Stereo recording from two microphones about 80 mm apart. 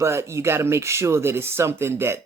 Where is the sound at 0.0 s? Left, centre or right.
Right.